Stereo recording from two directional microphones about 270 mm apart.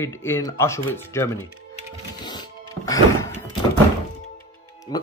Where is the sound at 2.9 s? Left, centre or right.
Centre.